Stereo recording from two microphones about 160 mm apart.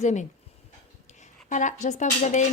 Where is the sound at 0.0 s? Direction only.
45° left (ahead or behind).